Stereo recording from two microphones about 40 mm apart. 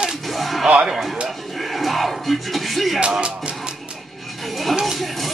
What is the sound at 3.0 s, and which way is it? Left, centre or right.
Music, right.